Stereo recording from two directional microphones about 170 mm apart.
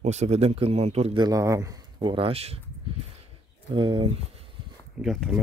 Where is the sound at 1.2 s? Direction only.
20° right (ahead or behind); by 2.6 s 35° right (ahead or behind).